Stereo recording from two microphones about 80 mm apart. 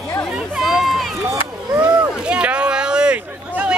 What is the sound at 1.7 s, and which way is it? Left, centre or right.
Chop, centre.